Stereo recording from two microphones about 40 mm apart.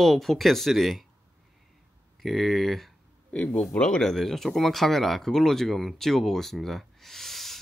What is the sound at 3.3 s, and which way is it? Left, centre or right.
Speech, left.